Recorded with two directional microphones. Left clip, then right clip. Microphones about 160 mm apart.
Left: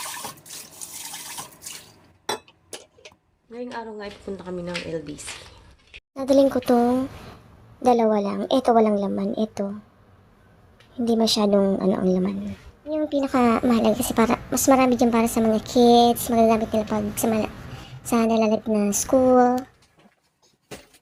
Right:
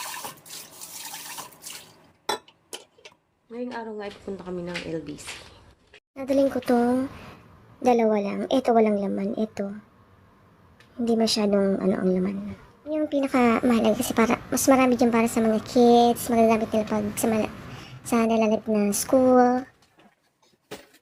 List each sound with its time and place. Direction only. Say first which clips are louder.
0.0 s drip: left 1 dB; centre (ahead or behind)
1.0 s water: left 1 dB; centre (ahead or behind)
2.2 s a sound: even; 10° right (ahead or behind)
3.5 s a woman's voice: even; 5° right (ahead or behind)
6.1 s speech: left 5 dB; 20° left (ahead or behind)
6.7 s a woman's voice: left 2 dB; centre (ahead or behind)
10.9 s a woman's voice: left 2 dB; centre (ahead or behind)